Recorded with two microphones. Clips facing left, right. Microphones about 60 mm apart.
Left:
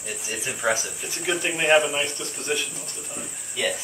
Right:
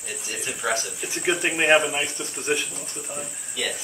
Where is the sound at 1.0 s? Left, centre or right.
Right.